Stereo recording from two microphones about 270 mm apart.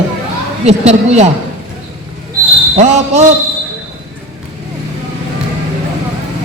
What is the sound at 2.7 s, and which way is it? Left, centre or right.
Speech, right.